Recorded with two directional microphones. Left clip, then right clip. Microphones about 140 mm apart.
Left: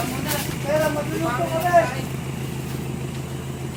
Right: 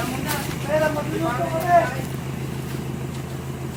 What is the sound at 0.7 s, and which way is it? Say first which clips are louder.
Vehicle: even; 10° right (ahead or behind).